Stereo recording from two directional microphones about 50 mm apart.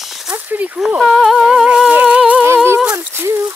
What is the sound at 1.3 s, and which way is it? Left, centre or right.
Humming, centre.